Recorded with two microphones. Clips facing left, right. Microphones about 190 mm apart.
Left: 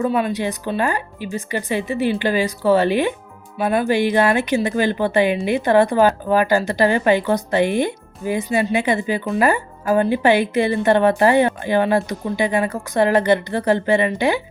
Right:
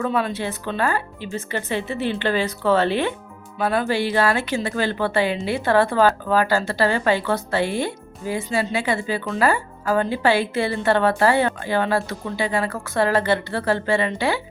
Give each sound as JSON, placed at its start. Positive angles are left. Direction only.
{"t": 0.0, "sound": "speech", "side_deg": 10}